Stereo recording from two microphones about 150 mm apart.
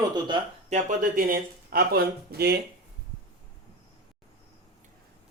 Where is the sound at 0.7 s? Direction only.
65° right (ahead or behind); by 2.6 s 90° right.